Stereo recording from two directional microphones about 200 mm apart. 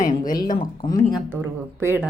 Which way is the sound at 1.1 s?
10° right (ahead or behind).